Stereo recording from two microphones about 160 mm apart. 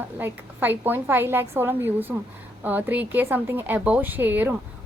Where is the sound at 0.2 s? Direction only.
10° right (ahead or behind).